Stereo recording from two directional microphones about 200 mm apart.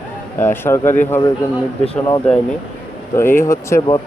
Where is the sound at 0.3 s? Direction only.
10° left (ahead or behind).